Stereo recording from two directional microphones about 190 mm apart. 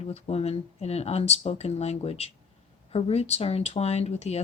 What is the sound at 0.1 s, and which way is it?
Speech, 35° left (ahead or behind).